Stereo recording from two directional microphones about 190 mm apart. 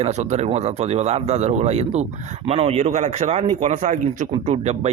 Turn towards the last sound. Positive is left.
turn(degrees=-35)  # may be behind; listen again after turning